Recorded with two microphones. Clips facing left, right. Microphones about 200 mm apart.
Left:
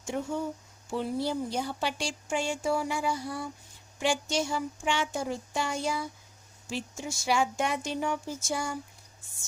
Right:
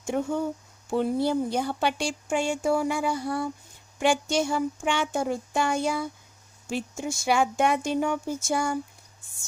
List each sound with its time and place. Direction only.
0.1 s speech: 55° right (ahead or behind)